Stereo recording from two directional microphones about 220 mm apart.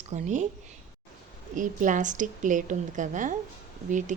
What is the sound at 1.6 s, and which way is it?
A woman's voice, 35° right (ahead or behind).